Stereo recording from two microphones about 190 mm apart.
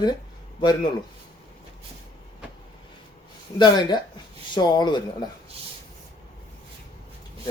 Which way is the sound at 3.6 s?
20° left (ahead or behind).